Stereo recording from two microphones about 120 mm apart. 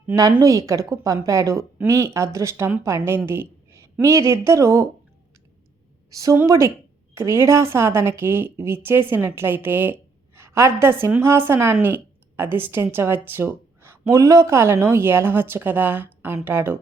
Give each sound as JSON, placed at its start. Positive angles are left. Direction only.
{"t": 0.2, "sound": "speech", "side_deg": -30}
{"t": 6.1, "sound": "speech", "side_deg": -25}